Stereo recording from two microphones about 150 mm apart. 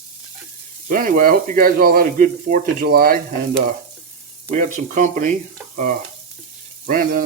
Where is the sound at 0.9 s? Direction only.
65° right (ahead or behind).